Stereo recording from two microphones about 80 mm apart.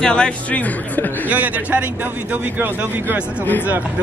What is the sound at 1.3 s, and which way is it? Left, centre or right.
Speech, centre.